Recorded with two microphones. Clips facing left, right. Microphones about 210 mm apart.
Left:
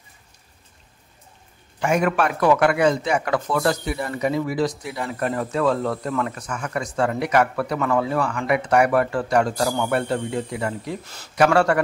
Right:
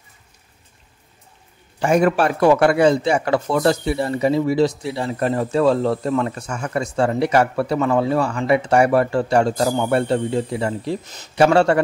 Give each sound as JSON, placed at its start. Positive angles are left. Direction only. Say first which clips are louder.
{"t": 1.8, "sound": "speech", "louder": "right 4 dB", "side_deg": -35}